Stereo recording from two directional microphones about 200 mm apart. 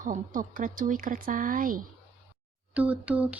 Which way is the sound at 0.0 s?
40° right (ahead or behind).